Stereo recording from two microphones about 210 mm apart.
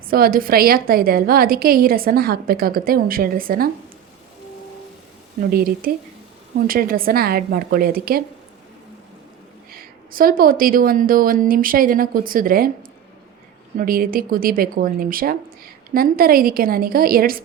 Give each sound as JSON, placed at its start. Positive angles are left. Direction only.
{"t": 0.1, "sound": "a woman's voice", "side_deg": -45}
{"t": 5.4, "sound": "a woman's voice", "side_deg": -45}
{"t": 9.7, "sound": "a woman's voice", "side_deg": -45}
{"t": 13.7, "sound": "a woman's voice", "side_deg": -45}